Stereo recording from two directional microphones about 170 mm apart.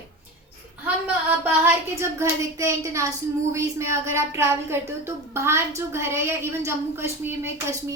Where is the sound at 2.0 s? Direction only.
15° right (ahead or behind).